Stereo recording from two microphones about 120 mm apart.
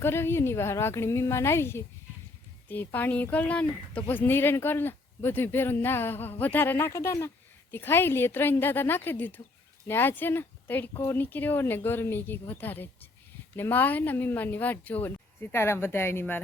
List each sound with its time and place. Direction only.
0.0 s a woman's voice: 20° left (ahead or behind)